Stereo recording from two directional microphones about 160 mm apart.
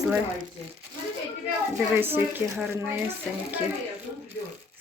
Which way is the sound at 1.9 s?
15° right (ahead or behind).